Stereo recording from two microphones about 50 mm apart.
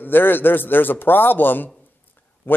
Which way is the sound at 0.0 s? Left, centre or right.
Left.